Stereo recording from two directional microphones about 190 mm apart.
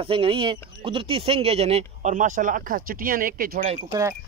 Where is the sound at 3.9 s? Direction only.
15° right (ahead or behind).